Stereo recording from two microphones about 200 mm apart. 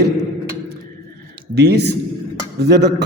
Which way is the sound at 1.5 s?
55° right (ahead or behind).